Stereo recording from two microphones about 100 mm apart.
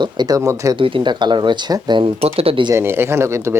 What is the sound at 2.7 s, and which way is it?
Speech, 25° right (ahead or behind).